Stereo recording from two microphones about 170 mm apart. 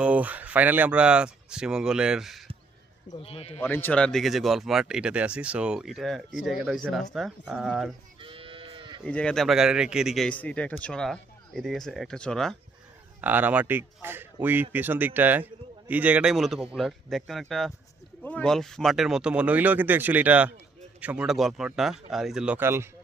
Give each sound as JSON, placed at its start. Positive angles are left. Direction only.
{"t": 0.0, "sound": "speech", "side_deg": -10}
{"t": 3.2, "sound": "speech", "side_deg": 35}
{"t": 3.6, "sound": "speech", "side_deg": 10}
{"t": 8.2, "sound": "sheep", "side_deg": -30}
{"t": 9.0, "sound": "speech", "side_deg": 5}
{"t": 13.2, "sound": "speech", "side_deg": -10}